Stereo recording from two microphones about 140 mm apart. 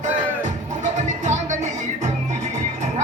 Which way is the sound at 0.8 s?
60° right (ahead or behind).